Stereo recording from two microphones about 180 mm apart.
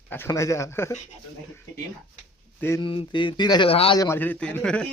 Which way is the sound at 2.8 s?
25° left (ahead or behind).